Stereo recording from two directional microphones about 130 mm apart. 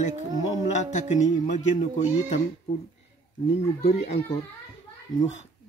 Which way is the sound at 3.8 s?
55° left (ahead or behind).